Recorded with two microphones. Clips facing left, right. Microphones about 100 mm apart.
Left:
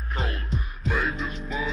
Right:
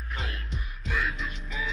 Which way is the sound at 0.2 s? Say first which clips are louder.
Left 10 dB; 40° left (ahead or behind).